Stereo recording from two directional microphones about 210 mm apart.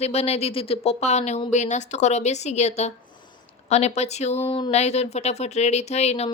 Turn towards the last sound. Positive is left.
turn(degrees=30)  # may be behind; listen again after turning